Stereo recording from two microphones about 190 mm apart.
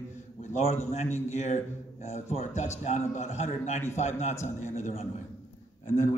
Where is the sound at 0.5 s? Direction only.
35° left (ahead or behind).